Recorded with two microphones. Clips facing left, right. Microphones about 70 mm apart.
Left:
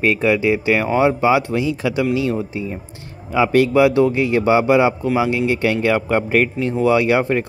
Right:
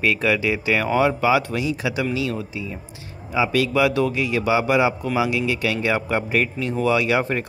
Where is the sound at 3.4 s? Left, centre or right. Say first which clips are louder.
Left 6 dB; left.